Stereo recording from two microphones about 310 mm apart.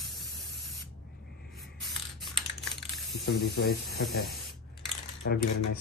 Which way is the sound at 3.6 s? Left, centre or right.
Left.